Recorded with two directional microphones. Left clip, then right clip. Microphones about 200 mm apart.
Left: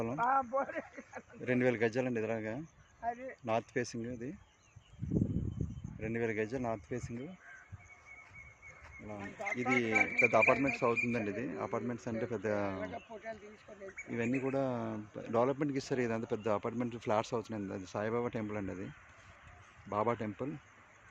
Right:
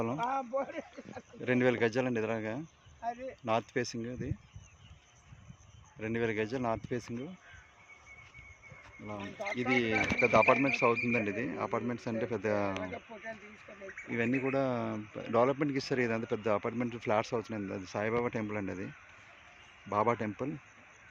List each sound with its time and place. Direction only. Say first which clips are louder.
0.3 s speech: left 2 dB; 20° left (ahead or behind)
1.4 s speech: right 3 dB; 5° right (ahead or behind)
6.0 s speech: right 2 dB; 10° right (ahead or behind)
9.2 s speech: even; 35° right (ahead or behind)
9.6 s speech: right 1 dB; 5° right (ahead or behind)
12.8 s speech: right 1 dB; 45° right (ahead or behind)
14.1 s speech: right 3 dB; 5° right (ahead or behind)
19.9 s speech: right 4 dB; 10° right (ahead or behind)